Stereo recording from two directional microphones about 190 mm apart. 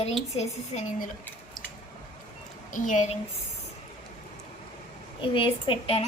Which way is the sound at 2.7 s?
45° left (ahead or behind).